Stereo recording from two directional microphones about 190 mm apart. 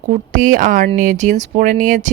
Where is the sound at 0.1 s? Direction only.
40° right (ahead or behind).